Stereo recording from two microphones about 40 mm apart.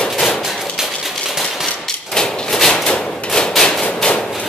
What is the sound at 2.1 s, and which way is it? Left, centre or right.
Hammer, centre.